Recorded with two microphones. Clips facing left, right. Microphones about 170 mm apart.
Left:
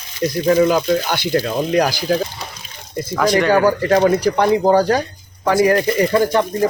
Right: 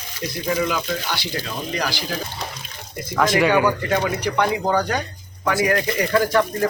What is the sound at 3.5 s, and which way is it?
Speech, 35° left (ahead or behind).